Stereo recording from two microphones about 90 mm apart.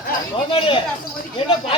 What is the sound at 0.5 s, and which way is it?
Speech, 75° left (ahead or behind).